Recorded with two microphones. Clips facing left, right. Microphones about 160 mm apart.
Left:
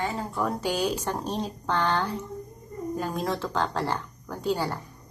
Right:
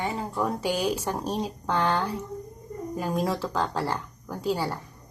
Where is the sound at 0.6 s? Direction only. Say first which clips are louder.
Right 1 dB; 10° right (ahead or behind).